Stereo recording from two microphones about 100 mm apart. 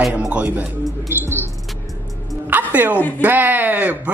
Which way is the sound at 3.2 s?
20° right (ahead or behind).